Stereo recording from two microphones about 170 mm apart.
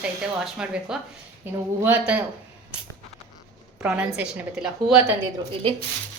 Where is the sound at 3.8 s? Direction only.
5° right (ahead or behind).